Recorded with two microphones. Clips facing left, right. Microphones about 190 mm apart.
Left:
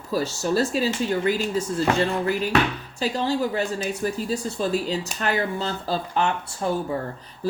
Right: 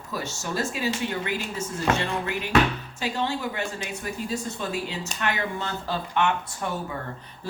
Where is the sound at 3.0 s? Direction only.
35° left (ahead or behind).